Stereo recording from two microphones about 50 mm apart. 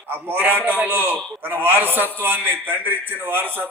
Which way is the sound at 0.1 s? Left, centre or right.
Right.